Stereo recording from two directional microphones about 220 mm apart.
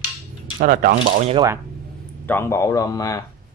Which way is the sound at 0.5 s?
40° right (ahead or behind).